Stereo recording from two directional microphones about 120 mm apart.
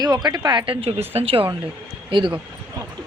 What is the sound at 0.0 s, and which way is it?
A woman's voice, 35° right (ahead or behind).